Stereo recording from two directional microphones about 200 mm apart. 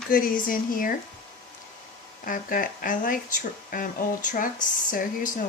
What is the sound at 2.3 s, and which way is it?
Speech, 45° left (ahead or behind).